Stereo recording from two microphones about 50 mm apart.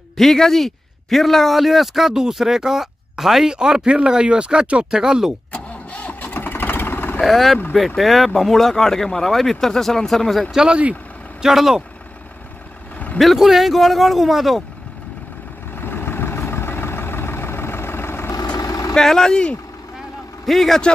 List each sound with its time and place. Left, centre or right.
0.2 s speech: centre
3.5 s speech: centre
5.5 s engine starting: left
7.2 s speech: centre
10.5 s speech: centre
13.2 s speech: centre
15.7 s vehicle: left
18.7 s vehicle: left
18.9 s speech: centre